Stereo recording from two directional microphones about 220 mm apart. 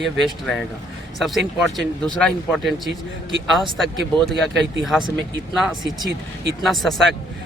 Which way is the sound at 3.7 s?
Centre (ahead or behind).